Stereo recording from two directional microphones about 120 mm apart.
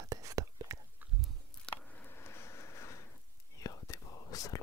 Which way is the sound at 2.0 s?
20° left (ahead or behind).